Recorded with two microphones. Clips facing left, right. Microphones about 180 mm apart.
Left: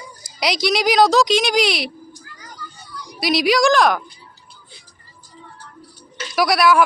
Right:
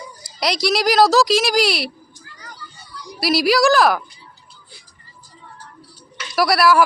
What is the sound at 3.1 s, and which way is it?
Speech, centre (ahead or behind).